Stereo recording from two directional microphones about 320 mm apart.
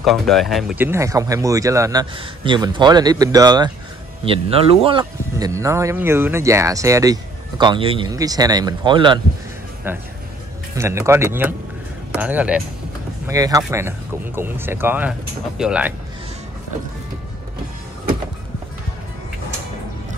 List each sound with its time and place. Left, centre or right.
0.0 s speech: centre